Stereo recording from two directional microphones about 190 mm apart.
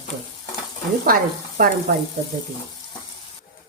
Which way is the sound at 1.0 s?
50° right (ahead or behind).